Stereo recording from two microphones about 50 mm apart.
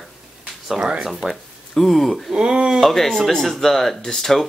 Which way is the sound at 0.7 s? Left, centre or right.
Centre.